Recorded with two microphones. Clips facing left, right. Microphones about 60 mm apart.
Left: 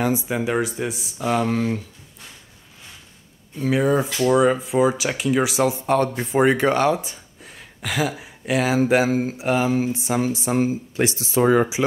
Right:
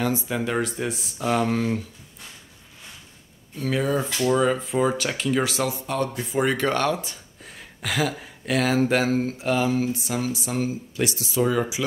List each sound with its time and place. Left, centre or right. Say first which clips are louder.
0.0 s speech: left 3 dB; centre
3.5 s speech: left 5 dB; centre
6.1 s speech: left 4 dB; left
6.4 s speech: left 5 dB; centre
7.4 s speech: left 1 dB; centre
9.5 s speech: left 2 dB; left